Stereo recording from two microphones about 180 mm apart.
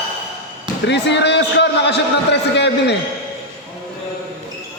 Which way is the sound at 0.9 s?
75° left (ahead or behind).